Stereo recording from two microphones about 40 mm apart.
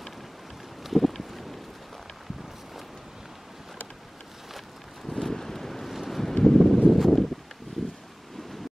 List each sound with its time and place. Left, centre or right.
0.8 s boat: centre
5.0 s wind: centre
6.4 s wind: centre
6.9 s a sound: centre